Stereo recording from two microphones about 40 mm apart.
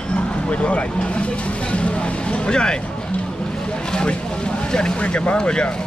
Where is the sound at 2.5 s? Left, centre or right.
Centre.